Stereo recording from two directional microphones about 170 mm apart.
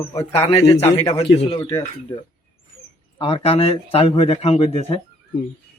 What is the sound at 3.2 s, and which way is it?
Speech, 35° left (ahead or behind).